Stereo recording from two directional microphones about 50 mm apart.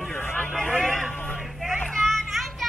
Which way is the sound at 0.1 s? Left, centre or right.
Left.